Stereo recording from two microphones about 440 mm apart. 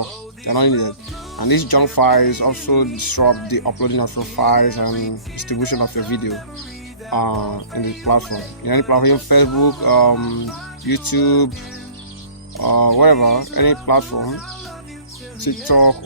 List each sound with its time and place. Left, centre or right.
0.0 s a sound: left
1.4 s speech: left
12.5 s speech: left
15.6 s speech: left